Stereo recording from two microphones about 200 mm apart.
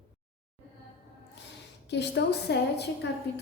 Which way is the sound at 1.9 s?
55° left (ahead or behind).